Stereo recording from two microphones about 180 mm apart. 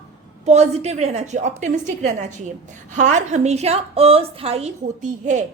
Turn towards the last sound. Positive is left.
turn(degrees=-45)  # may be behind; listen again after turning